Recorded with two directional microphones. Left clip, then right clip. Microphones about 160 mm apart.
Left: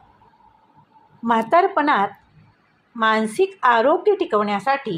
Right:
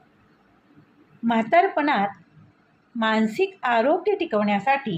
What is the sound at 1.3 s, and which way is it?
Speech, 20° left (ahead or behind).